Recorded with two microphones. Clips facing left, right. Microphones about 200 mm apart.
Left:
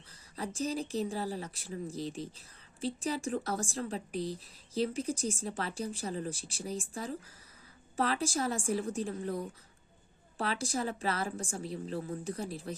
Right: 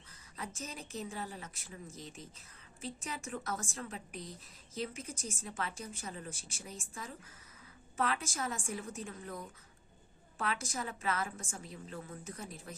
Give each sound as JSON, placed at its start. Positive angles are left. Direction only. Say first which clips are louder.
{"t": 0.3, "sound": "a woman's voice", "louder": "left 10 dB", "side_deg": 35}